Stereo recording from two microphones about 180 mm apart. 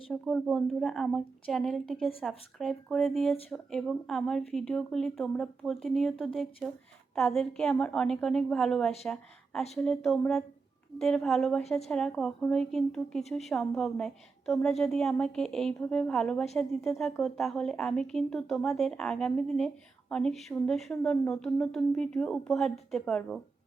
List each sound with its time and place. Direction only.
0.1 s a woman's voice: centre (ahead or behind)